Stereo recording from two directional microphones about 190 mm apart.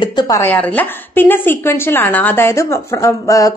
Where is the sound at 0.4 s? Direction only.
10° left (ahead or behind).